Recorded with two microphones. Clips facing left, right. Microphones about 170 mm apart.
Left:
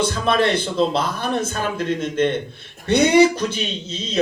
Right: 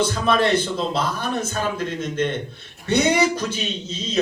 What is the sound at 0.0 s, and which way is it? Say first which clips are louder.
A man's voice: left 1 dB; 55° left (ahead or behind).